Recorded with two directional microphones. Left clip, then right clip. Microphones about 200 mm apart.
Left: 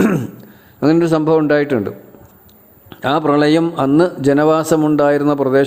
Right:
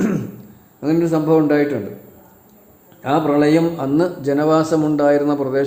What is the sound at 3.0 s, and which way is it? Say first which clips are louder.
A man's voice: left 2 dB; 45° left (ahead or behind).